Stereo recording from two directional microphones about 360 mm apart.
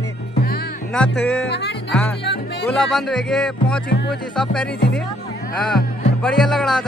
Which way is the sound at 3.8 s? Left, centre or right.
Left.